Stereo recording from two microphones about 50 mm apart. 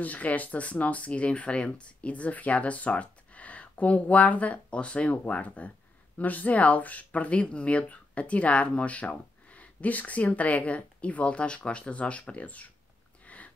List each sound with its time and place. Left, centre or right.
0.0 s speech: left